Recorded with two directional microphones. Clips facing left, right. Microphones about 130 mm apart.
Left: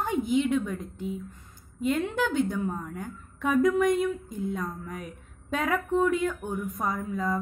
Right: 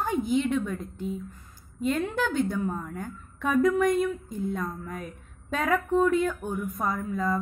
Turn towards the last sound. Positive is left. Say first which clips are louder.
# right 1 dB
turn(degrees=20)  # may be behind; listen again after turning